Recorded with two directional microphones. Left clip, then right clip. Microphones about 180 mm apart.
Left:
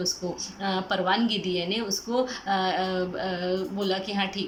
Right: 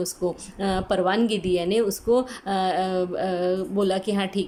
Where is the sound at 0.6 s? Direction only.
35° right (ahead or behind).